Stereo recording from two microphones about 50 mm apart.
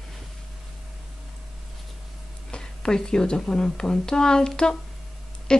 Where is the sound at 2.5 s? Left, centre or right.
Centre.